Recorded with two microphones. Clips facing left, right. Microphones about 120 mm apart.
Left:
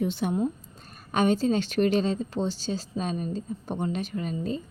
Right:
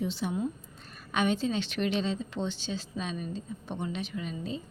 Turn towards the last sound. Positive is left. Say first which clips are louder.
# left 5 dB
turn(degrees=45)  # may be behind; listen again after turning